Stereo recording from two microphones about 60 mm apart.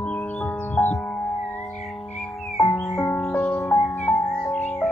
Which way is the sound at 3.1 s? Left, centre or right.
Left.